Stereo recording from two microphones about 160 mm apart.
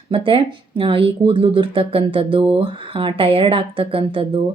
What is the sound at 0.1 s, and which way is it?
A woman's voice, 35° right (ahead or behind).